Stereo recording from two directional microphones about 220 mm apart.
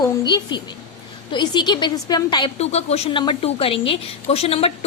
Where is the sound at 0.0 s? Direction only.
20° left (ahead or behind).